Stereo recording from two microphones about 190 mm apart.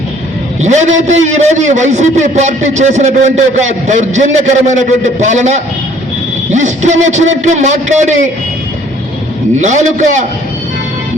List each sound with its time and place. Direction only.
0.6 s a man's voice: 40° right (ahead or behind)
9.6 s a man's voice: 40° right (ahead or behind)